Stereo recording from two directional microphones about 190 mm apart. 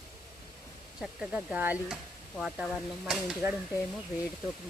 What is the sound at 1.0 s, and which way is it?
Speech, centre (ahead or behind).